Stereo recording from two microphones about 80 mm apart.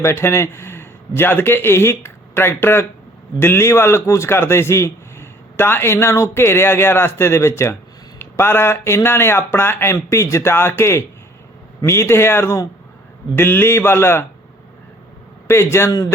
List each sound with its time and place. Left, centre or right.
0.0 s a man's voice: left
15.4 s a man's voice: left